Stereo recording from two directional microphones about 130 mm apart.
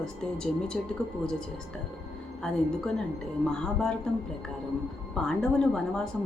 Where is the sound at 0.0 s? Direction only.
5° left (ahead or behind).